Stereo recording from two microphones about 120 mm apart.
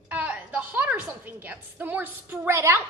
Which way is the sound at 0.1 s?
10° right (ahead or behind).